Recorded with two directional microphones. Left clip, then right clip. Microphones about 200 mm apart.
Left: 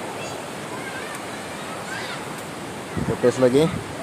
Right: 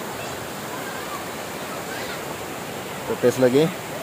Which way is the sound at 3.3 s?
Centre (ahead or behind).